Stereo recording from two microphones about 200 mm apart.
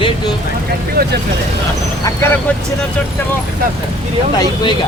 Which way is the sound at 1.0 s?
55° right (ahead or behind).